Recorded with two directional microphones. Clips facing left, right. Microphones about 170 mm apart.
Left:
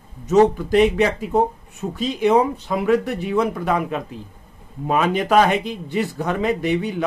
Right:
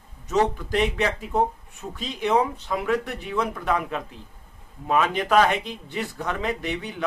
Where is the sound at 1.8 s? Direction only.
20° left (ahead or behind).